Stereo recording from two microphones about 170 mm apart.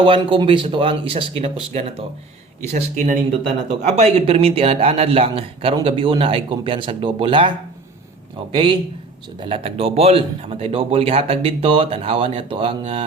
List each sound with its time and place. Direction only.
0.0 s speech: 30° right (ahead or behind)
2.9 s speech: 50° right (ahead or behind)
3.7 s speech: 40° right (ahead or behind)
8.5 s a man's voice: 30° right (ahead or behind)